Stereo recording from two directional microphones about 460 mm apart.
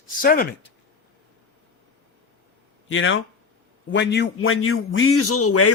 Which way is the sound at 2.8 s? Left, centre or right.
Left.